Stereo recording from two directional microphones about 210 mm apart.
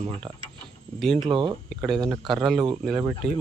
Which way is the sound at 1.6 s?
Centre (ahead or behind).